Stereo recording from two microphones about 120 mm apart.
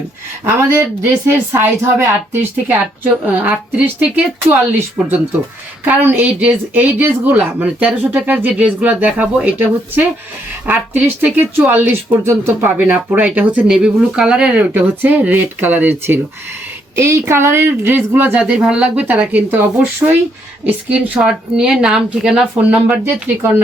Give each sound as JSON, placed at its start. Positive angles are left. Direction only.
{"t": 0.4, "sound": "a woman's voice", "side_deg": -20}